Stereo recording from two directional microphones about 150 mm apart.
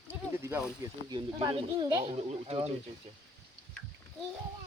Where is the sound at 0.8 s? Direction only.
25° right (ahead or behind); by 2.7 s 40° right (ahead or behind).